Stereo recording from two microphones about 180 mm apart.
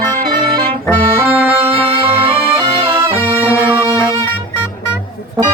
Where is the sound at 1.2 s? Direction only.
10° right (ahead or behind).